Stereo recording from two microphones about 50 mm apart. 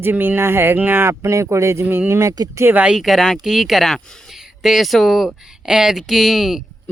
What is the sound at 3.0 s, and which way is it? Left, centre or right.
Speech, centre.